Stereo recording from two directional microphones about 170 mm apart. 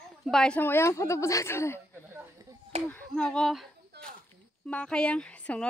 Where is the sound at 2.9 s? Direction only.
5° left (ahead or behind).